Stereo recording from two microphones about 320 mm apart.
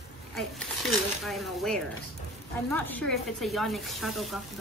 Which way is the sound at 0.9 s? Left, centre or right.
Centre.